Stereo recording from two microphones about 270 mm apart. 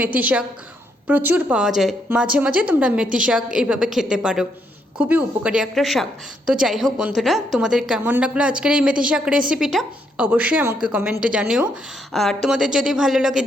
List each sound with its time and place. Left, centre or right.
0.0 s a woman's voice: centre